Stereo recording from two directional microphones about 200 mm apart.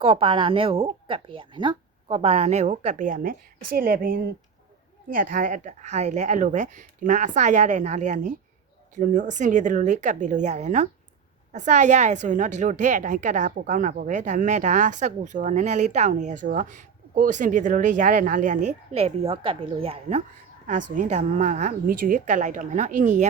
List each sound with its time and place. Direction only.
0.0 s a woman's voice: 25° right (ahead or behind)